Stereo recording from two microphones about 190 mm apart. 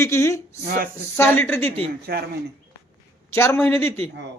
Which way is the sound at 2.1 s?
50° right (ahead or behind).